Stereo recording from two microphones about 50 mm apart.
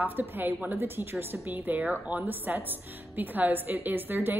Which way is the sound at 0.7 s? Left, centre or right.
Right.